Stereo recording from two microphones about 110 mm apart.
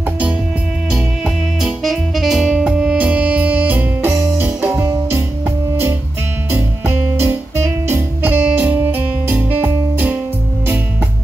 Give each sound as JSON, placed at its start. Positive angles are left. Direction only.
{"t": 1.2, "sound": "music", "side_deg": -5}
{"t": 4.7, "sound": "music", "side_deg": -25}
{"t": 6.5, "sound": "music", "side_deg": -25}